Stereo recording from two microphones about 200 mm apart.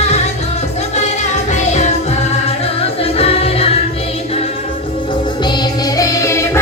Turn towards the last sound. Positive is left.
turn(degrees=15)  # may be behind; listen again after turning